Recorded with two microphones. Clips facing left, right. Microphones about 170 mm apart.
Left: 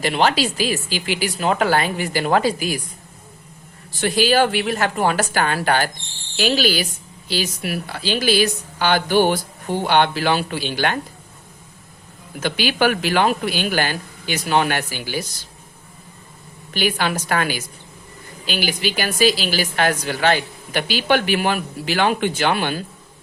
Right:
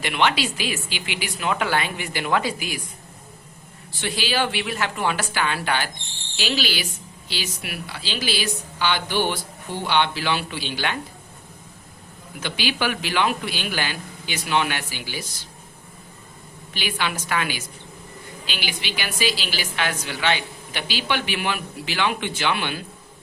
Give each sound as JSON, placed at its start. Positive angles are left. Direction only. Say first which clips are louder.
{"t": 0.0, "sound": "speech", "louder": "left 4 dB", "side_deg": 35}
{"t": 4.0, "sound": "a woman's voice", "louder": "left 8 dB", "side_deg": 45}
{"t": 12.4, "sound": "a woman's voice", "louder": "left 6 dB", "side_deg": 45}
{"t": 16.7, "sound": "a woman's voice", "louder": "left 6 dB", "side_deg": 45}